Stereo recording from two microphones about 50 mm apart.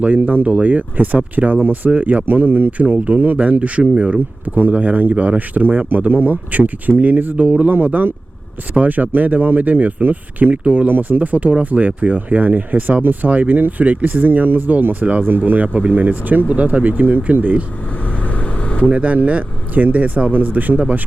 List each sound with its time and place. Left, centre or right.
0.0 s speech: right
18.2 s vehicle: left
18.9 s speech: right